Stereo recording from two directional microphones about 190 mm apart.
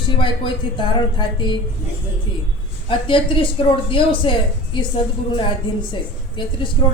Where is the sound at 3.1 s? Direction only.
25° left (ahead or behind).